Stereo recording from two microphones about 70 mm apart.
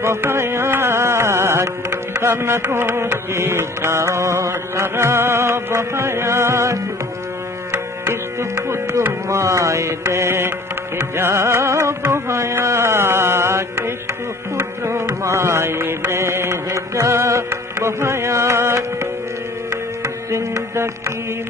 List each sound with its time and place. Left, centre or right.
0.0 s music: right
8.0 s music: right